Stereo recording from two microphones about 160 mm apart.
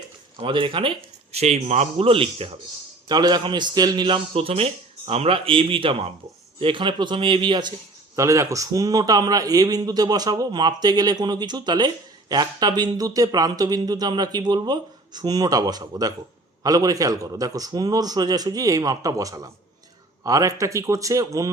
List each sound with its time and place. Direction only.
0.3 s a man's voice: 35° right (ahead or behind)